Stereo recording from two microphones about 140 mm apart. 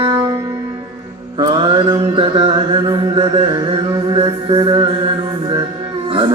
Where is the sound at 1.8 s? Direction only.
35° right (ahead or behind).